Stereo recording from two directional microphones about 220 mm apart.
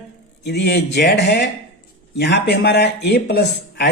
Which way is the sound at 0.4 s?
50° left (ahead or behind).